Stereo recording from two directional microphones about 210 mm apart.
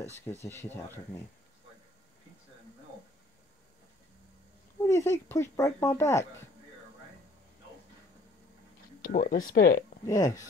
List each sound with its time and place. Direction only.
0.5 s speech: 10° left (ahead or behind)
4.8 s speech: 15° left (ahead or behind)
9.0 s speech: 40° left (ahead or behind)
10.0 s speech: 15° left (ahead or behind)